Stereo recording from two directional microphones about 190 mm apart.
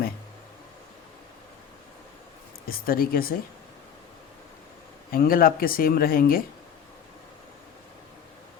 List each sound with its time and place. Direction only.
2.6 s speech: 50° left (ahead or behind)
5.1 s speech: 50° left (ahead or behind)